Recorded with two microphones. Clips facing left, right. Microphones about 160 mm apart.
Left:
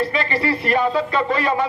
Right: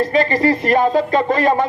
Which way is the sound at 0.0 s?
45° right (ahead or behind).